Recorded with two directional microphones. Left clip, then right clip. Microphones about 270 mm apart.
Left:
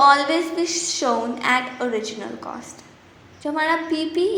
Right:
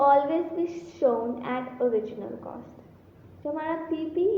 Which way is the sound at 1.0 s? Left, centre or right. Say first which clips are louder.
Left 3 dB; left.